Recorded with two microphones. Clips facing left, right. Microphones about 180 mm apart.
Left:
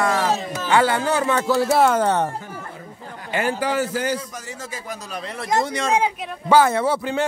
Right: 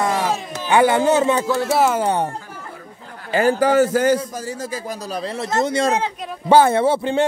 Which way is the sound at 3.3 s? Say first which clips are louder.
Right 7 dB; 40° right (ahead or behind).